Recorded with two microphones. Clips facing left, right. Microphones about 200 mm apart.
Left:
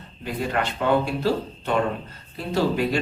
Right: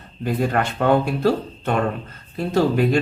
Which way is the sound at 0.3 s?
50° right (ahead or behind).